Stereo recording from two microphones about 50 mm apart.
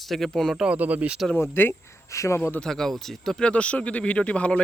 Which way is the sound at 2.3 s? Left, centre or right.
Left.